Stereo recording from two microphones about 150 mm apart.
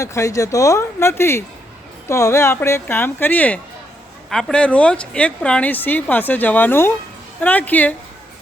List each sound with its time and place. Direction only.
0.0 s speech: 20° left (ahead or behind)